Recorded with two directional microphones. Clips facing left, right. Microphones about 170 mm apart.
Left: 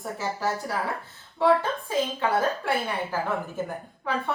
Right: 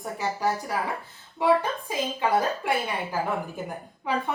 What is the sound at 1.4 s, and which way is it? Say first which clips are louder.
A woman's voice: left 1 dB; 15° right (ahead or behind).